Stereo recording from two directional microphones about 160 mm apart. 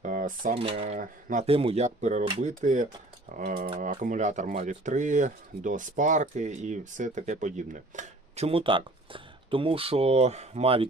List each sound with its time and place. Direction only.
0.0 s a sound: 55° right (ahead or behind)
0.8 s speech: 55° right (ahead or behind)
1.5 s speech: 35° right (ahead or behind)